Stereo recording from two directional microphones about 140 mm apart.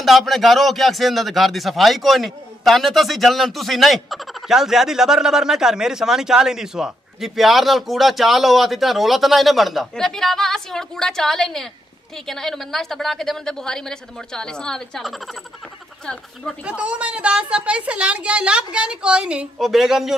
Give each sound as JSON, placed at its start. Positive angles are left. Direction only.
{"t": 0.0, "sound": "a man's voice", "side_deg": 0}
{"t": 16.6, "sound": "a woman's voice", "side_deg": -10}